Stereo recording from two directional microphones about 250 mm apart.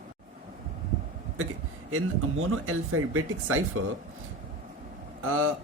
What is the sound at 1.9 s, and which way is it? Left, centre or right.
Speech, right.